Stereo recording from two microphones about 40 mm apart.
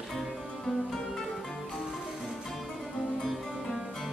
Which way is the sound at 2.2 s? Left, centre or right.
Centre.